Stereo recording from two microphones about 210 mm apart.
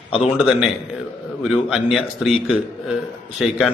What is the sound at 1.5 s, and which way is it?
A man's voice, 5° right (ahead or behind).